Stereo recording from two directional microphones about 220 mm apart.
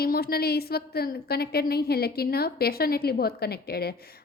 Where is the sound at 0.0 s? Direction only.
45° left (ahead or behind).